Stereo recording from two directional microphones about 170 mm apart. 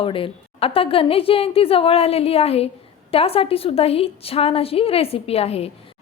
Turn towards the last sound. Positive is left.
turn(degrees=35)  # may be behind; listen again after turning